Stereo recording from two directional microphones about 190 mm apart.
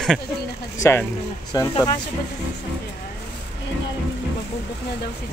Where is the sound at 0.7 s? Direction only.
15° left (ahead or behind).